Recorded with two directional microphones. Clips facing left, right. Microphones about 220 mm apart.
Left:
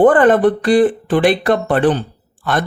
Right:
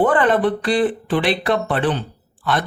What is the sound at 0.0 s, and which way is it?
Speech, 50° left (ahead or behind).